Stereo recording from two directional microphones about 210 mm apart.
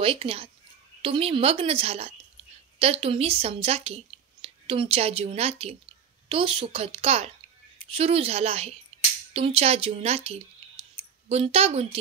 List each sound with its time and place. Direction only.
0.0 s a woman's voice: 25° right (ahead or behind)